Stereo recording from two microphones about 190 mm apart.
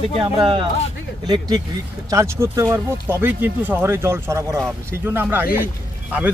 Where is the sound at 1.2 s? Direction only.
20° right (ahead or behind).